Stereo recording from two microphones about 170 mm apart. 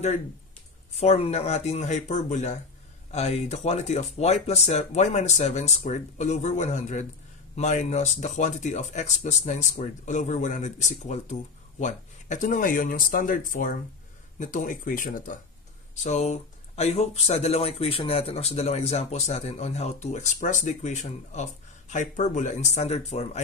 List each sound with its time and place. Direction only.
0.9 s speech: 40° left (ahead or behind); by 15.3 s 55° left (ahead or behind)
15.9 s speech: 40° left (ahead or behind)